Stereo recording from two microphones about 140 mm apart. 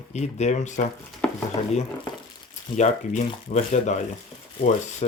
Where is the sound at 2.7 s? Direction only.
55° left (ahead or behind).